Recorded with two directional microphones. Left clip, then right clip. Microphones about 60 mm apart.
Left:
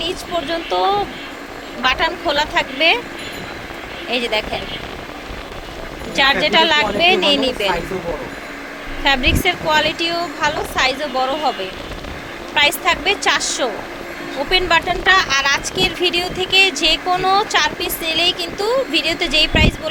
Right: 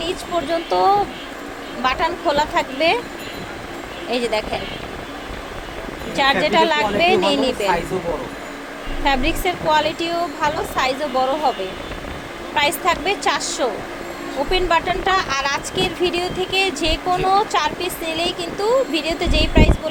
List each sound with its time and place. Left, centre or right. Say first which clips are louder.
0.0 s a sound: left 1 dB; centre
0.7 s speech: even; right
1.8 s speech: left 2 dB; centre
4.1 s speech: left 1 dB; centre
6.1 s speech: left 2 dB; centre
9.0 s speech: left 4 dB; centre
12.5 s a woman's voice: left 3 dB; right
14.5 s speech: left 3 dB; centre